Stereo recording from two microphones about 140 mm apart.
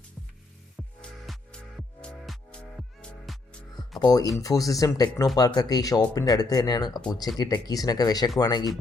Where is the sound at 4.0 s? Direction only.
25° left (ahead or behind).